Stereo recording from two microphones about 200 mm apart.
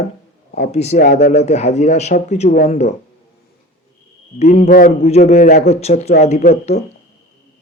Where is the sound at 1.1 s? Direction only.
55° left (ahead or behind).